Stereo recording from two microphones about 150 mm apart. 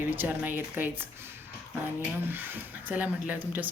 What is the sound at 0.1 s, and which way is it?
Speech, 10° right (ahead or behind).